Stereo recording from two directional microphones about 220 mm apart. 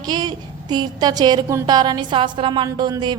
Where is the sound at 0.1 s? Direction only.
20° right (ahead or behind).